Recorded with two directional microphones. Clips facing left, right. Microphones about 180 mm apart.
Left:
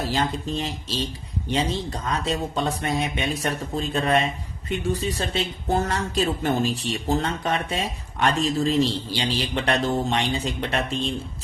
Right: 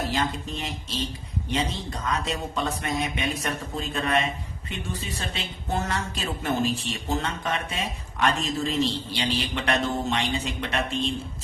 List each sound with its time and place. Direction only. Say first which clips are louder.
0.1 s speech: left 3 dB; 30° left (ahead or behind)